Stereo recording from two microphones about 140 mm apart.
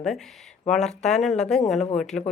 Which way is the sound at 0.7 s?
5° left (ahead or behind).